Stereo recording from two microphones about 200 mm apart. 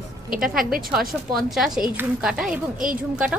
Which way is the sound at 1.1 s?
Centre (ahead or behind).